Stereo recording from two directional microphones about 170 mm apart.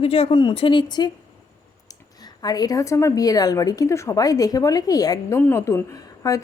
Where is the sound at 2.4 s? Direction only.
20° left (ahead or behind).